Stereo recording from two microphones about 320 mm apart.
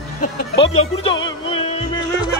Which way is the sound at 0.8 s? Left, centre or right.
Centre.